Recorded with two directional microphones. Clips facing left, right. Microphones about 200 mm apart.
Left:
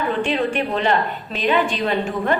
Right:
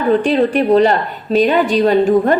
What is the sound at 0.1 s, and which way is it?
A woman's voice, 40° right (ahead or behind).